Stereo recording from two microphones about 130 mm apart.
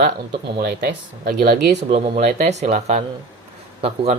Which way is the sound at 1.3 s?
85° right.